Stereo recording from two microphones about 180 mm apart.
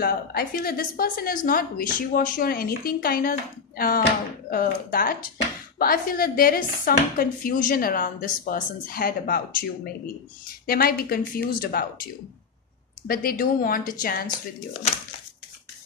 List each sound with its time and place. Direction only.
0.0 s a woman's voice: 60° left (ahead or behind)
10.7 s a woman's voice: 55° left (ahead or behind)